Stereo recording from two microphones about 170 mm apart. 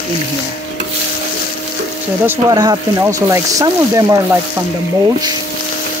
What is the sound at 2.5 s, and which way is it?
Speech, 25° right (ahead or behind).